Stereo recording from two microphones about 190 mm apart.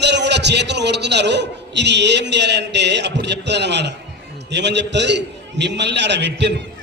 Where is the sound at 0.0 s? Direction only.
65° right (ahead or behind).